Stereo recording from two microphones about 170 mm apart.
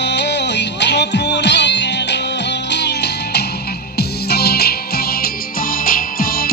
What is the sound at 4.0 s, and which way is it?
Music, 65° left (ahead or behind).